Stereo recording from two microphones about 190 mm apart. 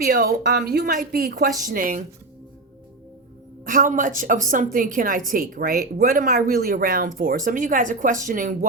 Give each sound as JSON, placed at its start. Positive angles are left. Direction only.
{"t": 0.0, "sound": "speech", "side_deg": -45}
{"t": 0.9, "sound": "speech", "side_deg": -45}
{"t": 3.6, "sound": "speech", "side_deg": -45}